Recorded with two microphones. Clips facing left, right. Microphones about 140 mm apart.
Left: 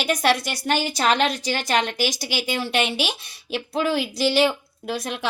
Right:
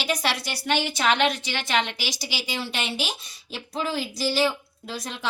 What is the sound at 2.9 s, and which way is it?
Speech, 65° left (ahead or behind).